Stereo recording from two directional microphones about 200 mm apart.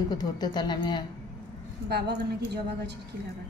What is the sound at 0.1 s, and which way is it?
Speech, 20° left (ahead or behind).